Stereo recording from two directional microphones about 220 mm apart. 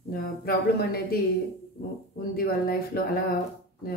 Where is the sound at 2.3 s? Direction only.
45° left (ahead or behind).